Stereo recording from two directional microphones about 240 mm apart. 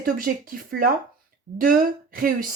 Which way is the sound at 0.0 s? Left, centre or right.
Right.